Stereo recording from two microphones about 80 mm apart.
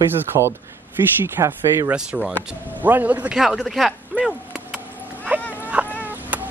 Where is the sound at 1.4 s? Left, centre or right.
Right.